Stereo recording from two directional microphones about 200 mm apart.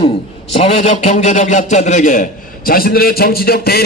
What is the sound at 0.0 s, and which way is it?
A man's voice, 30° left (ahead or behind).